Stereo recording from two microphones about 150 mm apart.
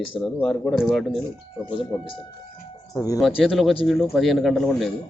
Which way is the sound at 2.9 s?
20° left (ahead or behind).